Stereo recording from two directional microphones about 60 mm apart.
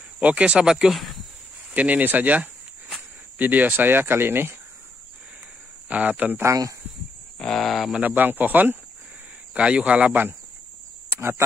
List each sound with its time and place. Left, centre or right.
0.2 s speech: right
1.7 s speech: right
5.9 s speech: right
6.4 s speech: right
7.3 s speech: centre
8.0 s speech: right
9.5 s speech: centre
11.1 s speech: right